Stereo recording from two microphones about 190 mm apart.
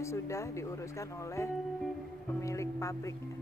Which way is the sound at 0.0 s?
15° left (ahead or behind).